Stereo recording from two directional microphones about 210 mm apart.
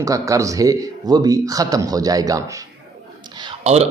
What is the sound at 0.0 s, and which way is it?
Speech, 15° right (ahead or behind).